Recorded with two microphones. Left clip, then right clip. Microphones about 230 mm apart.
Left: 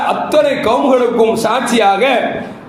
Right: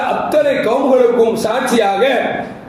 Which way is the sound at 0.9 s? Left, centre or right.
Left.